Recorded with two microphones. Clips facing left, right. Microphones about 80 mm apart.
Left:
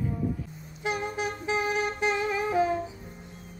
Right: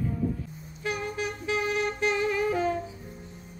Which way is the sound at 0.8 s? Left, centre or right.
Left.